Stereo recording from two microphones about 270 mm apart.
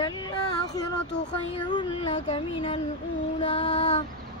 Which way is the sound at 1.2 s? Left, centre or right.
Centre.